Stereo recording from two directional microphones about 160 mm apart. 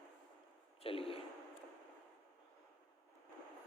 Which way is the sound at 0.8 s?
35° left (ahead or behind).